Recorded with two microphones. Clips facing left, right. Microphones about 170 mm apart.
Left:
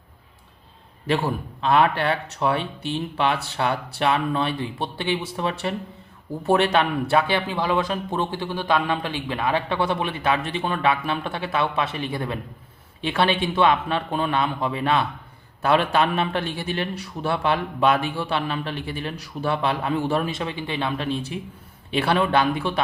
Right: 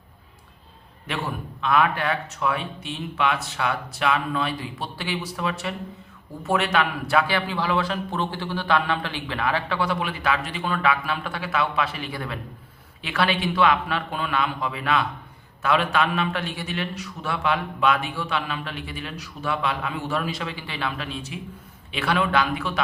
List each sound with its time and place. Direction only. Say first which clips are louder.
1.6 s a man's voice: left 3 dB; 30° left (ahead or behind)